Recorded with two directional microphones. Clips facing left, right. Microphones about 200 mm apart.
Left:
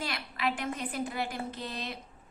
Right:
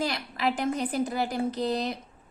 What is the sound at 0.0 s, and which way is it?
A woman's voice, 40° right (ahead or behind).